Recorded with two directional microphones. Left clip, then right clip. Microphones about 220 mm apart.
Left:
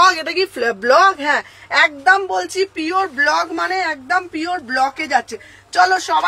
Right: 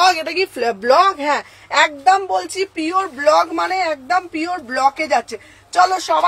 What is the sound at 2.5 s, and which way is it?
Speech, 15° left (ahead or behind).